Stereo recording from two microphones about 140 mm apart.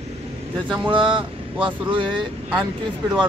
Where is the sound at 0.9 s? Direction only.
35° right (ahead or behind).